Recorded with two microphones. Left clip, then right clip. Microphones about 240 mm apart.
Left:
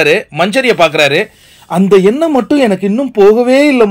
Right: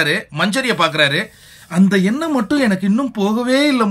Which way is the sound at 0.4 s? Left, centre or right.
Centre.